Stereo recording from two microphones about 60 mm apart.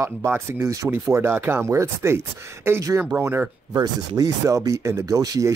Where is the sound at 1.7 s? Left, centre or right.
Right.